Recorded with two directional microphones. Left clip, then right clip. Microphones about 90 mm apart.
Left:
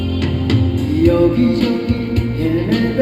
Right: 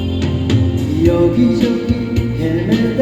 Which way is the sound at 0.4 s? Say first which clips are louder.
Even; 30° right (ahead or behind).